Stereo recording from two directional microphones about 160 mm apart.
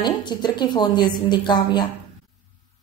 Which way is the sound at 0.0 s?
25° left (ahead or behind).